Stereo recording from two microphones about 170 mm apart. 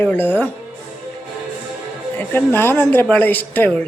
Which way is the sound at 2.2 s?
15° left (ahead or behind).